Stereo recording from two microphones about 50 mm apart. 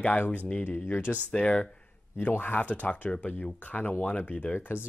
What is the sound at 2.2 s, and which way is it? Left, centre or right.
Speech, left.